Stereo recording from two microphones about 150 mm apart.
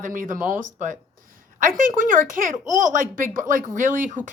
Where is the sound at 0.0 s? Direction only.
60° right (ahead or behind).